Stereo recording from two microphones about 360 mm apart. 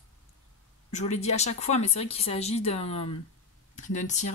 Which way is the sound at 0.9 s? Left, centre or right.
Centre.